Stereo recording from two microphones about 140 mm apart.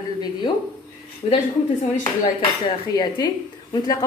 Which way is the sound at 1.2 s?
50° left (ahead or behind).